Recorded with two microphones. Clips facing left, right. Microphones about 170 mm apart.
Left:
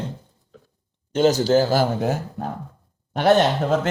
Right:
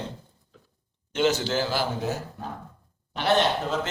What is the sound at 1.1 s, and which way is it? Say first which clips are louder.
A man's voice: left 7 dB; 40° left (ahead or behind).